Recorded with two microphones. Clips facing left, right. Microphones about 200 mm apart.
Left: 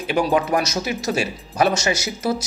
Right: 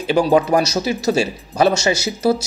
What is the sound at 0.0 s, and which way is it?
Speech, 30° right (ahead or behind).